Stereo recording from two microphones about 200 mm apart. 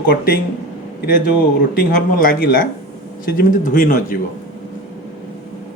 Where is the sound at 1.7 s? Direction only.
45° left (ahead or behind).